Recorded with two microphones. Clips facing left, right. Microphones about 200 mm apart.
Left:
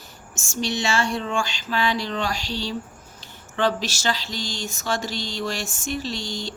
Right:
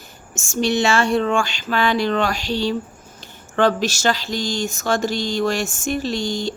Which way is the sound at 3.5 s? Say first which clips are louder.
Right 6 dB; 50° right (ahead or behind).